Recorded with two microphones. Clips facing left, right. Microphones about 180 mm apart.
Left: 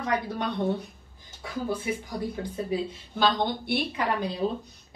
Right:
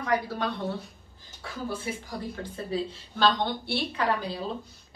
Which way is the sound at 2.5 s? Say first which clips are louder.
Right 1 dB; 10° left (ahead or behind).